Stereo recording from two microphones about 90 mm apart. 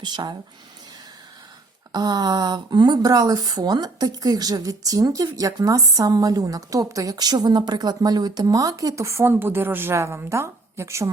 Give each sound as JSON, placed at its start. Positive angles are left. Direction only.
{"t": 0.0, "sound": "speech", "side_deg": -55}
{"t": 1.9, "sound": "speech", "side_deg": -50}